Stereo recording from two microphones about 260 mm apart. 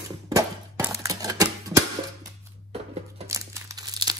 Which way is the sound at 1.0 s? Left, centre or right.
Centre.